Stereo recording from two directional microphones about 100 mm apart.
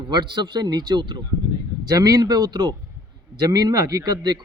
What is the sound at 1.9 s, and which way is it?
Speech, 40° right (ahead or behind).